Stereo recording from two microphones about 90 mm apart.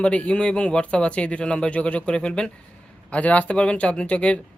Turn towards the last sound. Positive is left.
turn(degrees=15)  # may be behind; listen again after turning